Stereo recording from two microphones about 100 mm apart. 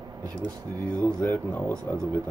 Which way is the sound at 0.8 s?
15° left (ahead or behind).